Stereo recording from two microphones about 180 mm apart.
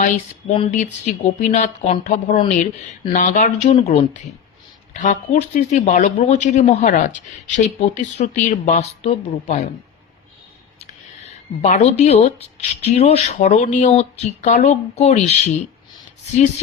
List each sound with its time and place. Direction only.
0.5 s speech: 40° left (ahead or behind)
11.6 s speech: 40° left (ahead or behind)